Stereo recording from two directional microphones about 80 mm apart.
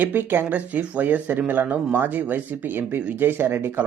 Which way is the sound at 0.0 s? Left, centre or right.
Right.